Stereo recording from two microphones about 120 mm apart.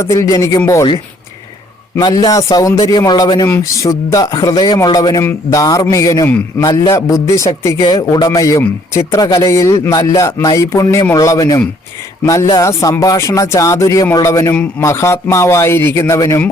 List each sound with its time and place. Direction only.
0.0 s speech: 25° left (ahead or behind)
2.0 s a man's voice: 35° left (ahead or behind)
7.8 s speech: 40° left (ahead or behind)